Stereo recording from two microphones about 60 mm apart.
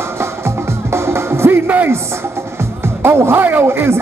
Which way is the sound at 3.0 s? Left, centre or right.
Right.